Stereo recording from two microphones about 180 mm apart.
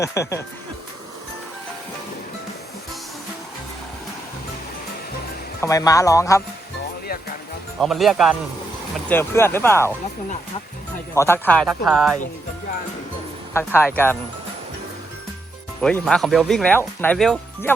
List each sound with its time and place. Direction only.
0.0 s speech: 15° left (ahead or behind)
5.5 s speech: 20° left (ahead or behind)
7.8 s speech: centre (ahead or behind)
9.0 s speech: 15° left (ahead or behind)
11.1 s speech: 15° left (ahead or behind)
13.5 s speech: 10° left (ahead or behind)
15.8 s speech: 5° left (ahead or behind)